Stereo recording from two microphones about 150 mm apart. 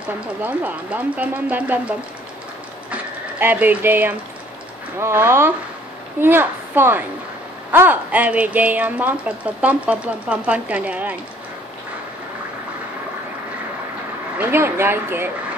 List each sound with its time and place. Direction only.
0.4 s speech: 10° right (ahead or behind)
2.9 s a sound: 10° right (ahead or behind)
4.9 s speech: 15° right (ahead or behind)
14.4 s speech: 15° right (ahead or behind)